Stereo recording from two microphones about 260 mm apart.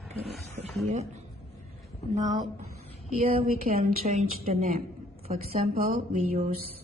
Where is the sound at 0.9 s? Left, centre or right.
Right.